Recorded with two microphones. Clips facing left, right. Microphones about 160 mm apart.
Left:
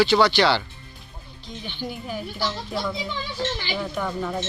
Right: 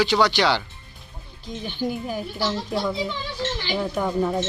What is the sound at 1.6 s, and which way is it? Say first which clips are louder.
Speech: right 6 dB; 45° right (ahead or behind).